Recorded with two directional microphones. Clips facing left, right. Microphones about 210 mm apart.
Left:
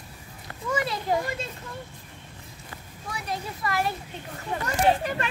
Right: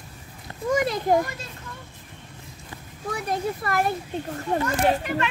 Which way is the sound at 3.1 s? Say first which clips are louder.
Right 7 dB; 50° right (ahead or behind).